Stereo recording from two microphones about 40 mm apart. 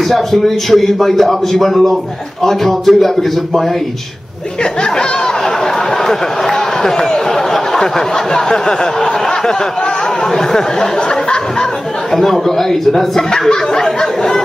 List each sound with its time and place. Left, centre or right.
0.1 s a man's voice: centre
6.0 s a man's voice: centre